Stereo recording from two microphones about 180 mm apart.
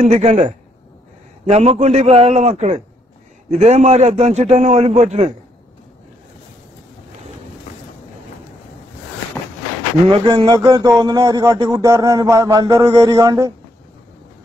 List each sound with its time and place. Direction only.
0.0 s a man's voice: 35° right (ahead or behind)
10.1 s speech: 25° right (ahead or behind)